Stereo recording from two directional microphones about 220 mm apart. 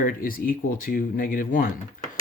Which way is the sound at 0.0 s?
40° left (ahead or behind).